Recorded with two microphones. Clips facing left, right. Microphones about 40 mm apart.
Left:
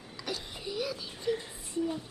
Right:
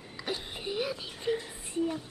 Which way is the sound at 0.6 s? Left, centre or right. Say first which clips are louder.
Right 2 dB; right.